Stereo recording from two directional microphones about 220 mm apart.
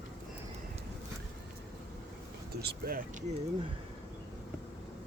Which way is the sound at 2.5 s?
45° right (ahead or behind).